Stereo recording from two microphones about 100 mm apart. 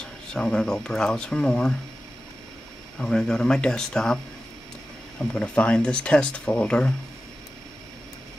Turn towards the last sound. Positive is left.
turn(degrees=15)  # may be behind; listen again after turning